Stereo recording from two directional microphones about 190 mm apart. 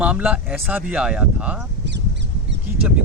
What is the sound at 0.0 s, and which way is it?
Speech, 5° right (ahead or behind).